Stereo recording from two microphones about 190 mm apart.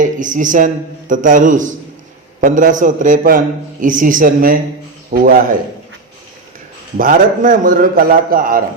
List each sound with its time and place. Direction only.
0.0 s a man's voice: 45° right (ahead or behind)
6.9 s a man's voice: 45° right (ahead or behind)